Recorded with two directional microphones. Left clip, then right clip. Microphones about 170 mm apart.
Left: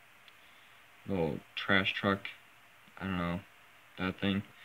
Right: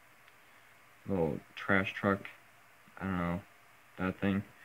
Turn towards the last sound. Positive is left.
turn(degrees=15)  # may be behind; listen again after turning